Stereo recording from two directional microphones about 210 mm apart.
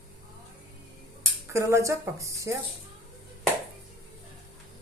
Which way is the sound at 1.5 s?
15° right (ahead or behind).